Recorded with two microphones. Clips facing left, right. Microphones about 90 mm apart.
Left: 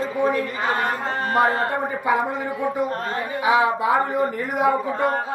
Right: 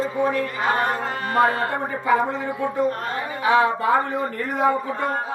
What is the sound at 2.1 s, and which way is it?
Speech, 15° left (ahead or behind).